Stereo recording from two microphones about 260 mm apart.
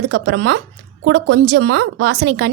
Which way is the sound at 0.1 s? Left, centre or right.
Right.